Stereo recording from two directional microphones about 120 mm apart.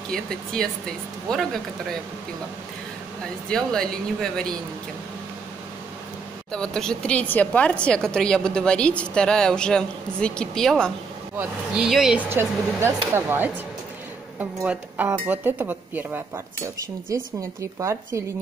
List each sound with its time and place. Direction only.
0.1 s speech: 5° left (ahead or behind)
3.4 s speech: 5° left (ahead or behind)
6.5 s speech: 5° left (ahead or behind)
12.3 s speech: 20° right (ahead or behind)
17.1 s speech: 25° right (ahead or behind)